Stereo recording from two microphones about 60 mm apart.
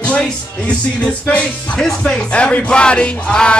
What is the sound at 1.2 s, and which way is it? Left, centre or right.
Speech, centre.